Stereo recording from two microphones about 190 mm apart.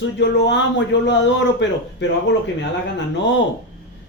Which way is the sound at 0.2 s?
65° left (ahead or behind).